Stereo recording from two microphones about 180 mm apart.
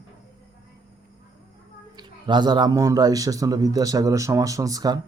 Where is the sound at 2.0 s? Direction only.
25° right (ahead or behind).